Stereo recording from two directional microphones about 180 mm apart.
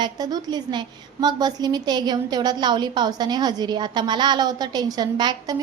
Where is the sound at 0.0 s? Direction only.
20° right (ahead or behind).